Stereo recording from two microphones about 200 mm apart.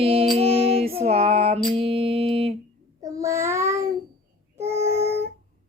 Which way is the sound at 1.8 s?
30° right (ahead or behind).